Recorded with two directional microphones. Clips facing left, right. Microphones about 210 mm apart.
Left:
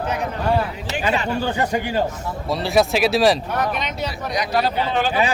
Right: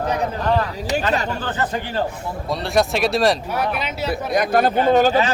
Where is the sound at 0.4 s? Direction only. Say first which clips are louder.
Left 2 dB; 10° left (ahead or behind).